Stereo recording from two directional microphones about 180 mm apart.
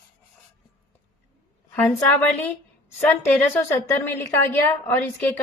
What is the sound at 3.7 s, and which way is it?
A woman's voice, 15° left (ahead or behind).